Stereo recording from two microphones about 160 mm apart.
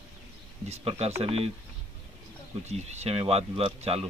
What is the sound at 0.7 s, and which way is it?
Speech, 40° right (ahead or behind).